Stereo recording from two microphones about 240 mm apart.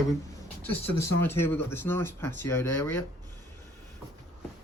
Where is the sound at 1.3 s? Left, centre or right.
Centre.